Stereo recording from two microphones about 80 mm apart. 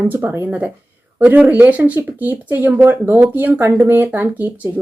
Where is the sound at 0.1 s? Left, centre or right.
Right.